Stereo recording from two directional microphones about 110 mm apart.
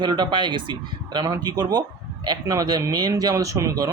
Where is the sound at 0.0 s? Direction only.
45° right (ahead or behind).